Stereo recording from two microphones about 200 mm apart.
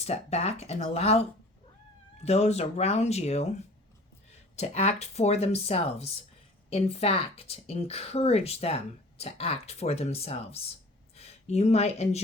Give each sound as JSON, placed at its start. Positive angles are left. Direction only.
{"t": 0.0, "sound": "speech", "side_deg": 30}
{"t": 4.5, "sound": "speech", "side_deg": 35}